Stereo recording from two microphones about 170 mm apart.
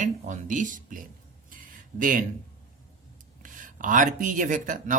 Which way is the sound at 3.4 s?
50° right (ahead or behind).